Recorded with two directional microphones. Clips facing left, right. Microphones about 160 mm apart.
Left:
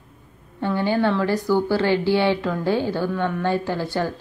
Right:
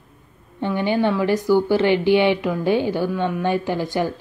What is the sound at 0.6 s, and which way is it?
A woman's voice, 20° right (ahead or behind).